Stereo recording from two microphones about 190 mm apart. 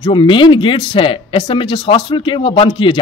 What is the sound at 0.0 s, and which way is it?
A woman's voice, 25° left (ahead or behind).